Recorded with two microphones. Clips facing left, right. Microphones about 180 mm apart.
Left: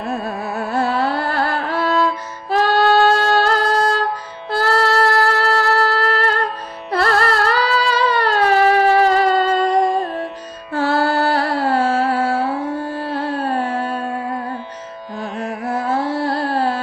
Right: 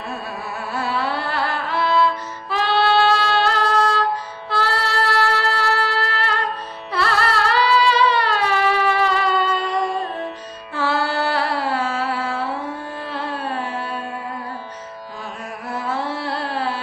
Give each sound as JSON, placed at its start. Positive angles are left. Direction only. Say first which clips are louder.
{"t": 0.1, "sound": "carnatic music", "louder": "left 7 dB", "side_deg": 45}
{"t": 2.5, "sound": "music", "louder": "left 4 dB", "side_deg": 45}
{"t": 13.0, "sound": "carnatic music", "louder": "left 5 dB", "side_deg": 45}
{"t": 15.4, "sound": "carnatic music", "louder": "left 7 dB", "side_deg": 45}